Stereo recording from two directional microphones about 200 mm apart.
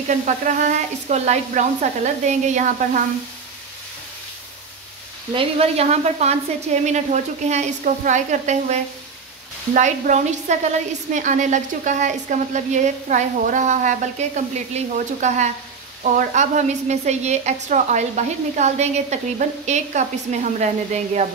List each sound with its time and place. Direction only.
0.1 s a woman's voice: 40° right (ahead or behind)
5.3 s a woman's voice: 30° right (ahead or behind)
9.8 s a woman's voice: 35° right (ahead or behind)